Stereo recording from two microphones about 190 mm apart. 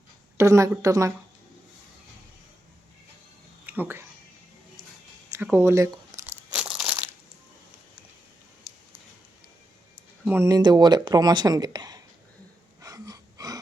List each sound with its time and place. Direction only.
0.3 s a woman's voice: 15° right (ahead or behind)
3.7 s speech: 10° right (ahead or behind)
5.3 s speech: 10° right (ahead or behind)
6.1 s crumpling: 10° right (ahead or behind)
10.2 s speech: 15° right (ahead or behind)
12.8 s gasp: 20° right (ahead or behind)